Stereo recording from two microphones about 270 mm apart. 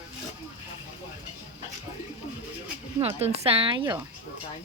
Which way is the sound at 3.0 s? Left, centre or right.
Right.